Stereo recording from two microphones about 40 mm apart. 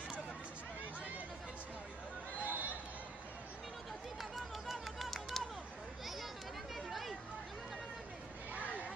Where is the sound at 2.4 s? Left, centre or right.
Right.